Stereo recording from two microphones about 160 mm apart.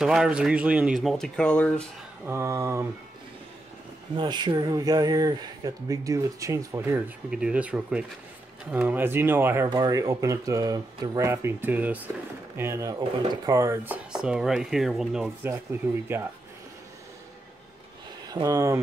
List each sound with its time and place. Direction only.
0.0 s speech: 5° right (ahead or behind)
2.2 s speech: 15° right (ahead or behind)
4.2 s speech: 30° right (ahead or behind)
7.2 s speech: 5° right (ahead or behind)
14.1 s speech: 5° right (ahead or behind)
15.4 s speech: 15° right (ahead or behind)
18.3 s speech: 20° right (ahead or behind)